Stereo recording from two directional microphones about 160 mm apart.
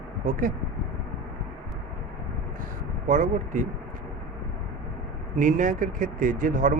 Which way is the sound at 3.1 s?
50° right (ahead or behind).